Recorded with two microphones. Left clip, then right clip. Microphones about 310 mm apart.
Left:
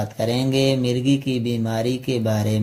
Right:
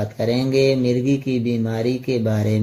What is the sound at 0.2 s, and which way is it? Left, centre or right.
Speech, left.